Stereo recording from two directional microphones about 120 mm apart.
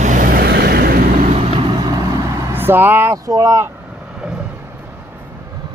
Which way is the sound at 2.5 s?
15° right (ahead or behind).